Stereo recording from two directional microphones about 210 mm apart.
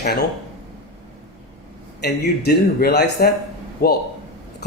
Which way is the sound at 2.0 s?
50° left (ahead or behind).